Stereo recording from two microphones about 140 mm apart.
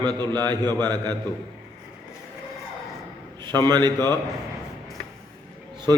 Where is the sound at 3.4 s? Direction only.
30° right (ahead or behind).